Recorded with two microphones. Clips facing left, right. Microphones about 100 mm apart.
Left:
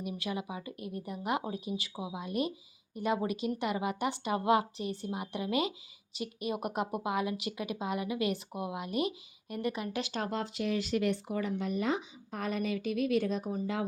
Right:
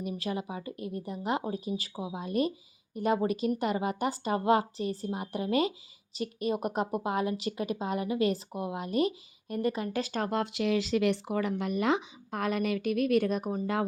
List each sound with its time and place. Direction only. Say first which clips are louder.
0.0 s a woman's voice: right 3 dB; 35° right (ahead or behind); by 10.5 s 55° right (ahead or behind)
10.5 s speech: right 4 dB; 90° right; by 13.8 s 60° right (ahead or behind)